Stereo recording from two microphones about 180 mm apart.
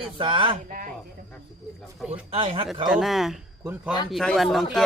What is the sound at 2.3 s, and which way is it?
Speech, 30° right (ahead or behind).